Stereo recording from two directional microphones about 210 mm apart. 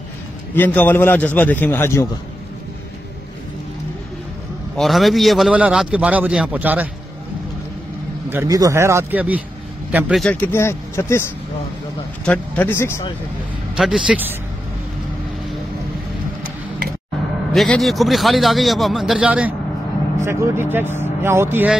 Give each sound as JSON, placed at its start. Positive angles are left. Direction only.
{"t": 0.6, "sound": "a man's voice", "side_deg": 10}
{"t": 4.7, "sound": "a man's voice", "side_deg": 0}
{"t": 8.3, "sound": "a man's voice", "side_deg": -15}
{"t": 10.5, "sound": "a man's voice", "side_deg": 10}
{"t": 12.3, "sound": "a man's voice", "side_deg": 10}
{"t": 13.7, "sound": "a man's voice", "side_deg": -5}
{"t": 17.5, "sound": "a man's voice", "side_deg": 0}